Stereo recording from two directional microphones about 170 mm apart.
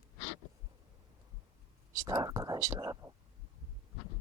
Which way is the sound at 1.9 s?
20° right (ahead or behind).